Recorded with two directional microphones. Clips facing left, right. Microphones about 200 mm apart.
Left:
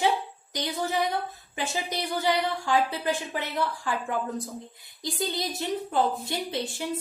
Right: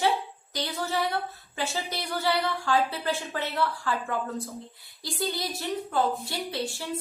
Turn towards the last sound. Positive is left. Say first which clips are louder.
# left 1 dB
turn(degrees=20)  # may be behind; listen again after turning